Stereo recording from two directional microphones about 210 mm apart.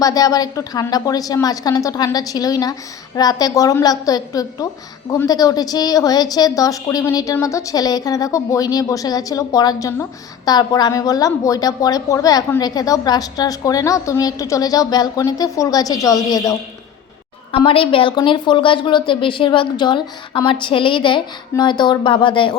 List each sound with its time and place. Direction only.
0.0 s a woman's voice: 15° left (ahead or behind)